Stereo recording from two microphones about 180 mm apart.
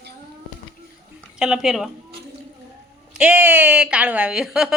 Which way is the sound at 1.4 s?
5° right (ahead or behind).